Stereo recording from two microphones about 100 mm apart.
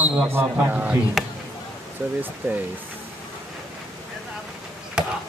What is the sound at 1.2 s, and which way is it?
Basketball bounce, centre (ahead or behind).